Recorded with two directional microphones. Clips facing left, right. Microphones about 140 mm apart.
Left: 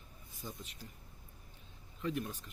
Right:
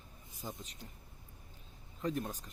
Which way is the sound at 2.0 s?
40° right (ahead or behind).